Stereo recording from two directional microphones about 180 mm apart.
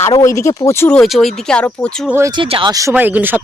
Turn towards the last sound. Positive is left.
turn(degrees=-10)  # may be behind; listen again after turning